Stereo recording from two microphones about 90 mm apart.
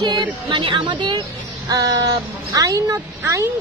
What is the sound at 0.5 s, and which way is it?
A woman's voice, 65° right (ahead or behind).